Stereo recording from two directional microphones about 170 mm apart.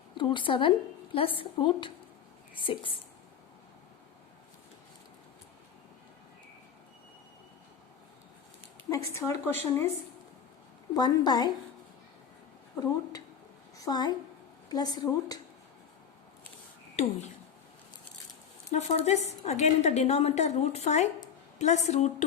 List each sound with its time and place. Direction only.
0.2 s a woman's voice: 30° left (ahead or behind)
8.9 s a woman's voice: 20° left (ahead or behind)
10.9 s a woman's voice: 25° left (ahead or behind)
12.7 s a woman's voice: 20° left (ahead or behind)
16.9 s speech: 40° left (ahead or behind)
18.7 s a woman's voice: 40° left (ahead or behind)